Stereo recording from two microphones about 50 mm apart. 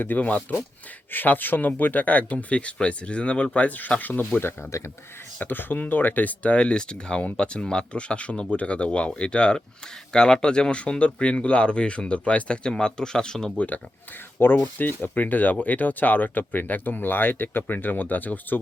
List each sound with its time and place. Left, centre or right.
0.0 s speech: left
5.4 s speech: left; by 13.5 s centre
13.6 s speech: left
14.3 s speech: left